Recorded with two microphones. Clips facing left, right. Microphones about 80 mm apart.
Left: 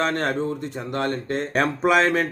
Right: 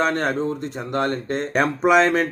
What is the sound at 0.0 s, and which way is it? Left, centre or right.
Speech, centre.